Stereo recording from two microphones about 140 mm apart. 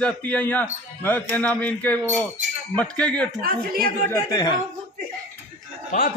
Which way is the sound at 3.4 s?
90° right.